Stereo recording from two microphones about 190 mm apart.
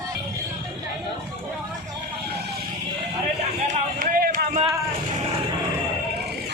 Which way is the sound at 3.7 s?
45° right (ahead or behind).